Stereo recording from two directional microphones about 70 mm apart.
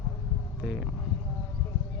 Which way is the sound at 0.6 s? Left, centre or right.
Centre.